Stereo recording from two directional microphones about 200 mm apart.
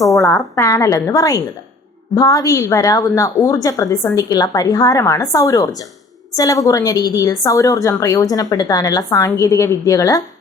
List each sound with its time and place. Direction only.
0.0 s a woman's voice: 15° left (ahead or behind)